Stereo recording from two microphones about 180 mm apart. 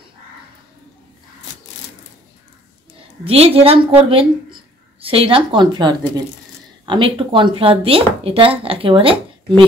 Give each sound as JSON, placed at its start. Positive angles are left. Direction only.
{"t": 3.3, "sound": "a woman's voice", "side_deg": -30}